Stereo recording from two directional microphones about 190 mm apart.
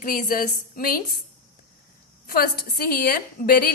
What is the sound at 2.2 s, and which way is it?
A woman's voice, 50° left (ahead or behind).